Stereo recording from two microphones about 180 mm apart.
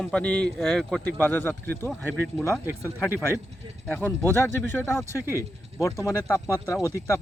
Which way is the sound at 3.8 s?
10° left (ahead or behind).